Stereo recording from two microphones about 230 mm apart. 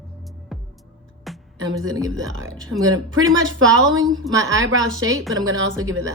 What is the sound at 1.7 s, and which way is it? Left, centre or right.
Speech, centre.